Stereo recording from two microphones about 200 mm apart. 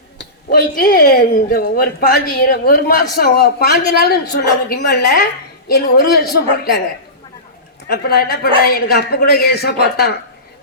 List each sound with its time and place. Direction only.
0.5 s a woman's voice: 50° left (ahead or behind)
7.9 s a woman's voice: 50° left (ahead or behind)